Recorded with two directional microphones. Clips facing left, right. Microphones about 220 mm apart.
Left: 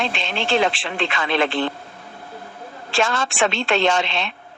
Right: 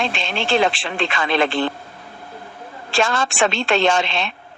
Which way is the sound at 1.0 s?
40° right (ahead or behind).